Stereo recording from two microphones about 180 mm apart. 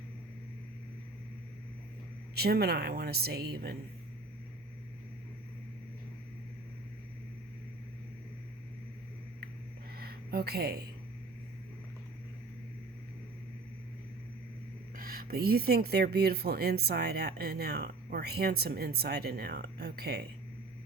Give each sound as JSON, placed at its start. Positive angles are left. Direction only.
{"t": 2.3, "sound": "speech", "side_deg": -60}
{"t": 9.9, "sound": "a sound", "side_deg": -60}
{"t": 14.9, "sound": "speech", "side_deg": -55}